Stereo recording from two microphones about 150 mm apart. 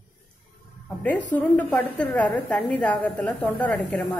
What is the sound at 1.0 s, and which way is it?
A woman's voice, 10° left (ahead or behind).